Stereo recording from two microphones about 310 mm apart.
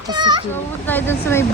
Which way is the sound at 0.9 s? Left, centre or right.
Centre.